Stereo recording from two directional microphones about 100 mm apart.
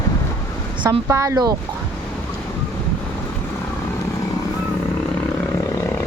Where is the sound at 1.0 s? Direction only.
30° right (ahead or behind).